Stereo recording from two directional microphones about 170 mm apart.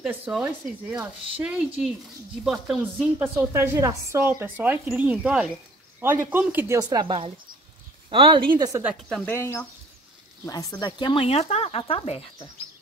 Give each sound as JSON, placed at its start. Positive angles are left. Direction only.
{"t": 0.0, "sound": "a woman's voice", "side_deg": -5}
{"t": 9.1, "sound": "speech", "side_deg": 10}